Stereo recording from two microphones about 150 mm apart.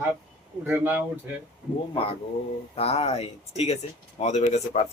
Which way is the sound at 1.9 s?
40° left (ahead or behind).